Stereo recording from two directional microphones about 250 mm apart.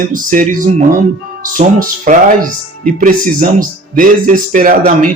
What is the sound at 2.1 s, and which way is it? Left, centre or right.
Speech, right.